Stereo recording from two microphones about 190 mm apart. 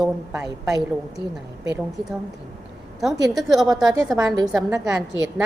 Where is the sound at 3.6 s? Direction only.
20° right (ahead or behind).